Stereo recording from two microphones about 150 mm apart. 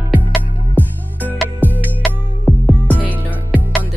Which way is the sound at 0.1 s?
10° right (ahead or behind).